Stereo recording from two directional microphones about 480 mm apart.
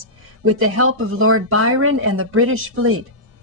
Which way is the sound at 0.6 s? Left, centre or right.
Right.